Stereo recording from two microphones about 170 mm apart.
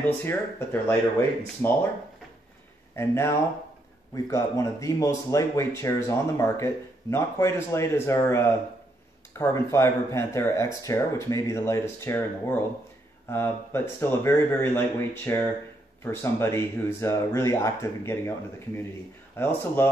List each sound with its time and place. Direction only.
0.0 s speech: 15° left (ahead or behind)
3.0 s speech: 15° left (ahead or behind)
19.3 s speech: 15° left (ahead or behind)